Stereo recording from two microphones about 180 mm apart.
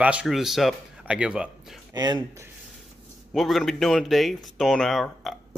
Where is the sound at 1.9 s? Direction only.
20° right (ahead or behind).